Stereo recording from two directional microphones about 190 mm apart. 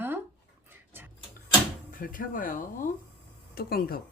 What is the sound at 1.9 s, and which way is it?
Speech, 45° left (ahead or behind).